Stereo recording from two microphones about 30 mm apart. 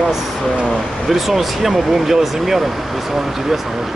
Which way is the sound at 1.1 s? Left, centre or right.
Centre.